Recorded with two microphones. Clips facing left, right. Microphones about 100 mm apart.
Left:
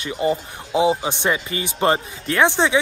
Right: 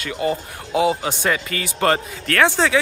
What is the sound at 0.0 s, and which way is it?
A man's voice, 20° left (ahead or behind).